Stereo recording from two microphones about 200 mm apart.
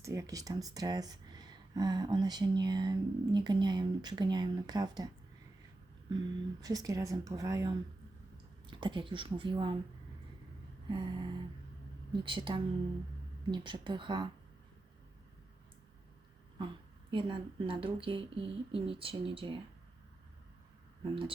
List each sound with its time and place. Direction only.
0.0 s speech: 15° right (ahead or behind)
6.1 s speech: 20° right (ahead or behind)
10.8 s speech: 20° right (ahead or behind)
17.1 s speech: 25° right (ahead or behind)